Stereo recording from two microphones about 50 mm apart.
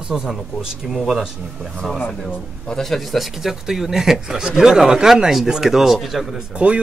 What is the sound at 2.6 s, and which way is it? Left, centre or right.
Speech, centre.